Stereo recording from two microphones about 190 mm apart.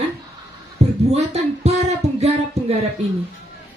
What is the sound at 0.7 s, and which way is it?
Speech, 35° right (ahead or behind).